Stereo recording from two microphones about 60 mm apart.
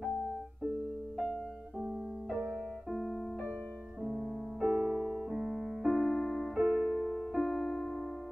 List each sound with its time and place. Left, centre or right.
2.9 s piano: centre
4.0 s piano: centre
4.6 s piano: centre
5.3 s music: centre
5.9 s keyboard: centre
6.6 s piano: centre
7.4 s music: centre